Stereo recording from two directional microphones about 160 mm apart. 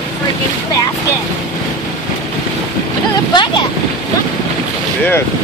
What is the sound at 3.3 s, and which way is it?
Boat, 30° left (ahead or behind).